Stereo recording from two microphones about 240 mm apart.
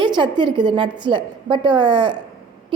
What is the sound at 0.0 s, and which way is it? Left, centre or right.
A woman's voice, centre.